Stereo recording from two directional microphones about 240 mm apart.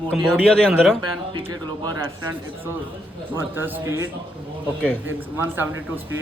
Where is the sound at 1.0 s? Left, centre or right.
Centre.